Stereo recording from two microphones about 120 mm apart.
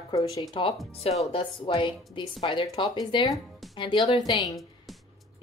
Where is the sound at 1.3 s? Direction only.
45° left (ahead or behind).